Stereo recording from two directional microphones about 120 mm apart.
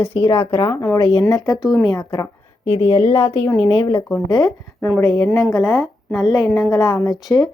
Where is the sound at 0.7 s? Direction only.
25° left (ahead or behind).